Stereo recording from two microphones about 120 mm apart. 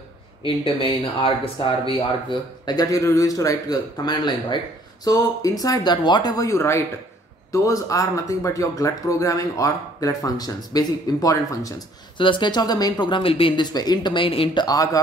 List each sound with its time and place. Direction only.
0.4 s speech: 45° left (ahead or behind); by 11.7 s 30° left (ahead or behind)
12.2 s speech: 40° left (ahead or behind)